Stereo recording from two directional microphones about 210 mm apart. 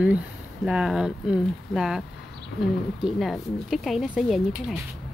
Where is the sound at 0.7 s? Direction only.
5° right (ahead or behind).